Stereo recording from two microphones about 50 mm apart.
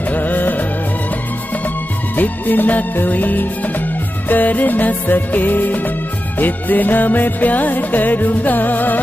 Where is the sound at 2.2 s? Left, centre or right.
Left.